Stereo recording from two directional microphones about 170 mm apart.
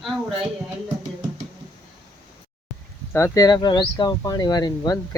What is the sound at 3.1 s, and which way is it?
Speech, 20° left (ahead or behind).